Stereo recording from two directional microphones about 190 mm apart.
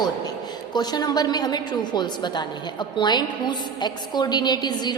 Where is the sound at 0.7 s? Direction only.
20° left (ahead or behind).